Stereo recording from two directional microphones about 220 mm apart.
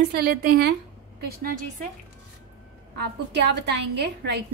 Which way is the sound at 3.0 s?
50° right (ahead or behind).